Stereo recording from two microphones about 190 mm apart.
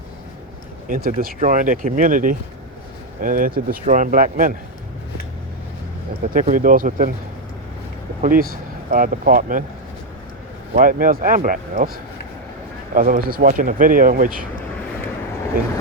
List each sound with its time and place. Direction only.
0.9 s speech: 50° right (ahead or behind)
6.3 s speech: 45° right (ahead or behind)
8.2 s speech: 50° right (ahead or behind)
10.8 s speech: 45° right (ahead or behind)
12.9 s speech: 45° right (ahead or behind)